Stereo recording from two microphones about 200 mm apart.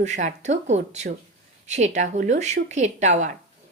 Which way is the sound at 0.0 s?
35° right (ahead or behind).